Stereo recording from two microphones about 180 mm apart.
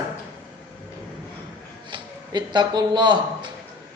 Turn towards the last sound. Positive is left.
turn(degrees=-25)  # may be behind; listen again after turning